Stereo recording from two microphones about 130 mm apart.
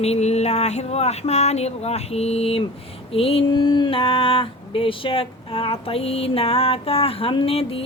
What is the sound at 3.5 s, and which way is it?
Speech, 35° left (ahead or behind).